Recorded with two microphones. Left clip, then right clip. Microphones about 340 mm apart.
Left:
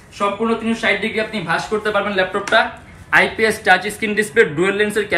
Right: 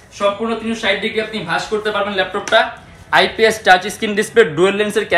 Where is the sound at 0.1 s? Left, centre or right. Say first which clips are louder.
Right 1 dB; centre.